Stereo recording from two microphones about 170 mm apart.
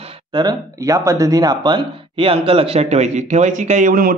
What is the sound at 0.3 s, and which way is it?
Speech, 25° right (ahead or behind).